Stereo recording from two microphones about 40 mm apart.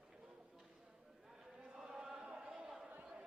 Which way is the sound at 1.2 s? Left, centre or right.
Centre.